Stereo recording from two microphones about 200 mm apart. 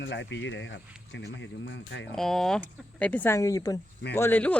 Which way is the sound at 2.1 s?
Centre (ahead or behind).